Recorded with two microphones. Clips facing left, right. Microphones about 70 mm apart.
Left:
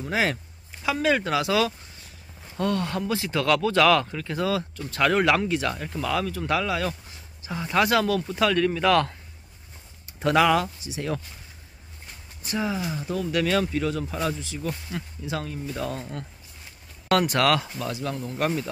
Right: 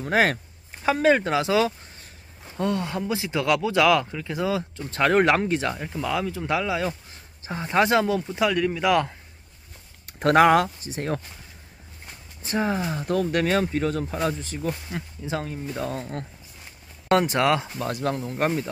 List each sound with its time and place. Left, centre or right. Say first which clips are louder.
0.0 s speech: right 4 dB; right
0.8 s speech: right 4 dB; right
5.8 s speech: even; centre
8.2 s speech: even; centre
10.0 s speech: right 3 dB; right
12.4 s speech: right 3 dB; right
14.7 s speech: right 2 dB; centre
15.2 s speech: right 2 dB; right
17.1 s speech: right 1 dB; right
17.8 s speech: right 4 dB; right
18.2 s speech: right 2 dB; right